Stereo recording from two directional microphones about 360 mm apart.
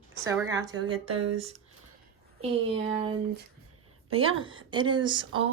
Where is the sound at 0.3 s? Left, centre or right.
Centre.